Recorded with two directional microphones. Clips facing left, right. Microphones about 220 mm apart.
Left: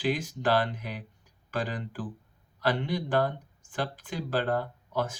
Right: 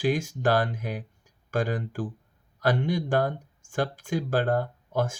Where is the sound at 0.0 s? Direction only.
45° right (ahead or behind).